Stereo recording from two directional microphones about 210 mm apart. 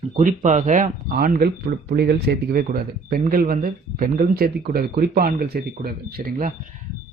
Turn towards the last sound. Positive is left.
turn(degrees=-40)  # may be behind; listen again after turning